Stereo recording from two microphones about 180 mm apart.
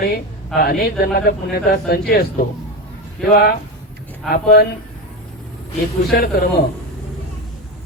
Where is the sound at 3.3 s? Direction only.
60° left (ahead or behind).